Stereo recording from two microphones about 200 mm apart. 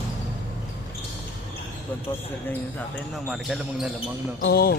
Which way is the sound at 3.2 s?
Centre (ahead or behind).